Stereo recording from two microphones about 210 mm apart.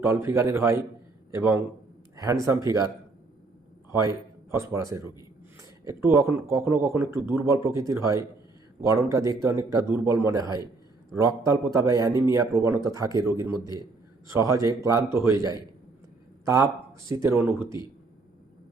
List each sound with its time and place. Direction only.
0.0 s speech: 15° right (ahead or behind)
4.5 s speech: 15° right (ahead or behind)
17.1 s speech: 15° right (ahead or behind)